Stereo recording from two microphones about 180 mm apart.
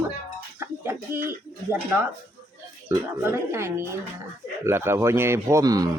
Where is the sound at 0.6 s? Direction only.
10° right (ahead or behind).